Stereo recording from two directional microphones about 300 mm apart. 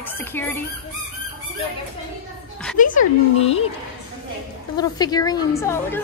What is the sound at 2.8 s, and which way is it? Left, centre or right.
Speech, left.